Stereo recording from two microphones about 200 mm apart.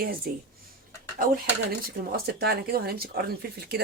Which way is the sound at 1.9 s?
50° right (ahead or behind).